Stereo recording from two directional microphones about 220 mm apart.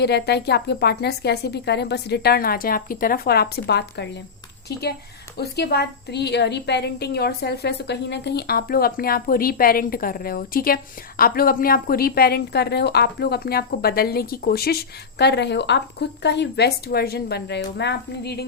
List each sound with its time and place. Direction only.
0.0 s a woman's voice: 50° left (ahead or behind)
5.4 s a woman's voice: 45° left (ahead or behind)